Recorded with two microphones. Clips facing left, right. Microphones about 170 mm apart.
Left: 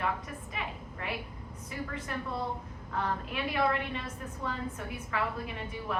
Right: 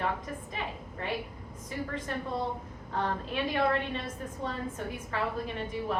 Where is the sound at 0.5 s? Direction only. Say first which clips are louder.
Right 2 dB; 30° right (ahead or behind).